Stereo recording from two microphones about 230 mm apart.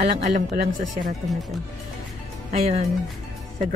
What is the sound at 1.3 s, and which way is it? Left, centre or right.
Speech, centre.